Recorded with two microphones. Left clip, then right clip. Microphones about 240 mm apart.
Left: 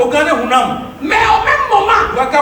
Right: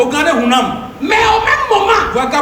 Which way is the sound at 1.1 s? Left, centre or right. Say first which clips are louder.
Even; right.